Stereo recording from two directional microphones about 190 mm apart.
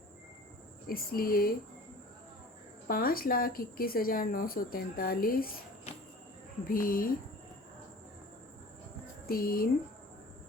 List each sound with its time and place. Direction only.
0.9 s speech: 50° left (ahead or behind)
2.8 s speech: 50° left (ahead or behind)
6.7 s speech: 50° left (ahead or behind)
9.2 s speech: 50° left (ahead or behind)